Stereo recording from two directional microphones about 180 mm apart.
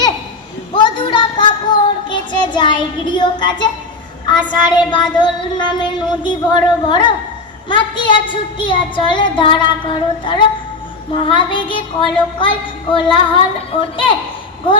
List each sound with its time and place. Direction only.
0.7 s child singing: 25° left (ahead or behind)